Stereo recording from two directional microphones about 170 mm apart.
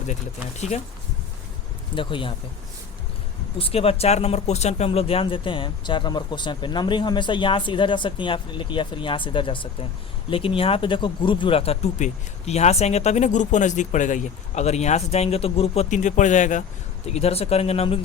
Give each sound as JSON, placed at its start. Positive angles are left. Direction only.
{"t": 2.0, "sound": "speech", "side_deg": 30}
{"t": 3.6, "sound": "speech", "side_deg": 35}